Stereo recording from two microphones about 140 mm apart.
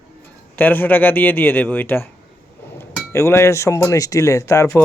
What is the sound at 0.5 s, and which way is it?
Speech, 15° left (ahead or behind).